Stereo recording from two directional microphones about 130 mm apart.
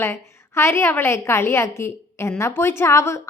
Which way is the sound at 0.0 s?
20° left (ahead or behind).